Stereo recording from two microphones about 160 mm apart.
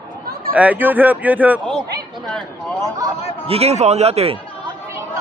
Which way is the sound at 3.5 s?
40° right (ahead or behind).